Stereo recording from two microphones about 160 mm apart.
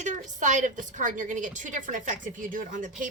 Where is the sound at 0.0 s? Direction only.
50° right (ahead or behind).